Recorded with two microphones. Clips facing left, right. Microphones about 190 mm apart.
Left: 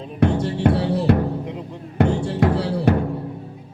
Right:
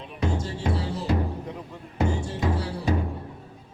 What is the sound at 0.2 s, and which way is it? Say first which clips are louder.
Music: left 10 dB; 65° left (ahead or behind).